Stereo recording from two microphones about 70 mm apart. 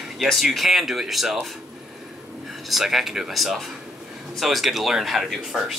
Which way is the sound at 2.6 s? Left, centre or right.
Centre.